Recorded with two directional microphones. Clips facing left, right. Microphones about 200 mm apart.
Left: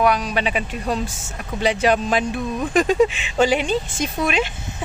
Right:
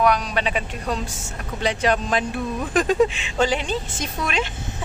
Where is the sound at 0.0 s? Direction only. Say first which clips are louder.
Left 1 dB; 5° left (ahead or behind).